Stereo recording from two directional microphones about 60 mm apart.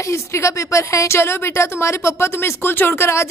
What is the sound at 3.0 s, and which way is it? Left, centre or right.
Speech, left.